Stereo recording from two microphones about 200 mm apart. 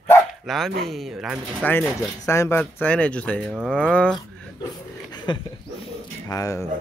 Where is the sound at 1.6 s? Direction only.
10° left (ahead or behind).